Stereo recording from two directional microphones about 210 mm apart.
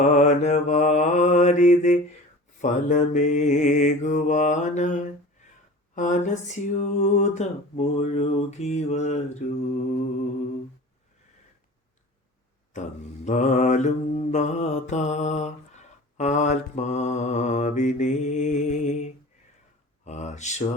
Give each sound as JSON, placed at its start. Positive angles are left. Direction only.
{"t": 0.0, "sound": "mantra", "side_deg": 35}
{"t": 12.7, "sound": "mantra", "side_deg": 35}